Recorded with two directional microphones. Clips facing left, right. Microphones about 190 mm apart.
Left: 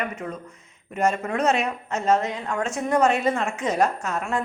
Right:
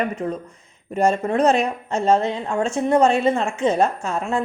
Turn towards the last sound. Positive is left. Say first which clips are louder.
# right 3 dB
turn(degrees=-25)  # may be behind; listen again after turning